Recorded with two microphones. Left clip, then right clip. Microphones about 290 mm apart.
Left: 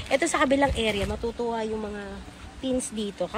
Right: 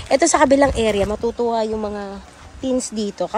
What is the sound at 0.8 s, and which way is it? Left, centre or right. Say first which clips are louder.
Speech: right 9 dB; centre.